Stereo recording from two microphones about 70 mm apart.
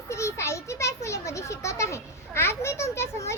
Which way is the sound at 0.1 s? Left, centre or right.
Left.